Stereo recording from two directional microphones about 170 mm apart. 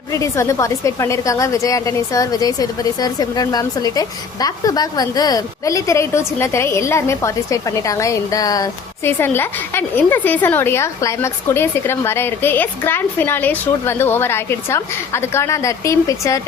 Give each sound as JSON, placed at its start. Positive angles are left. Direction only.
{"t": 0.1, "sound": "a woman's voice", "side_deg": 20}